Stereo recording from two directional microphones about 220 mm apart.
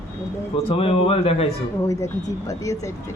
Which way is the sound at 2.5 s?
15° left (ahead or behind).